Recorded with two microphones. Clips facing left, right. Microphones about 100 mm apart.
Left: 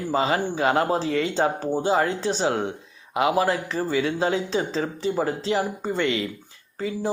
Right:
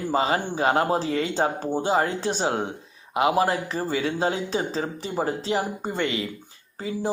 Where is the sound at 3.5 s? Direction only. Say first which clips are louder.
Left 2 dB; 45° right (ahead or behind); by 5.9 s 25° right (ahead or behind).